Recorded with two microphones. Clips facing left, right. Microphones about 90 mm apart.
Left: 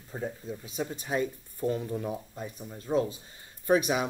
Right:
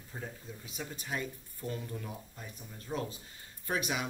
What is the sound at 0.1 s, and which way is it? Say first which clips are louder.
Speech: left 9 dB; 25° left (ahead or behind).